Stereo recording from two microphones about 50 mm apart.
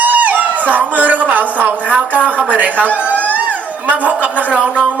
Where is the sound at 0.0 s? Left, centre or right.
Right.